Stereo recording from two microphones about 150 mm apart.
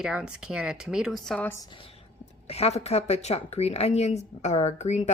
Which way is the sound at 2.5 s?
45° left (ahead or behind).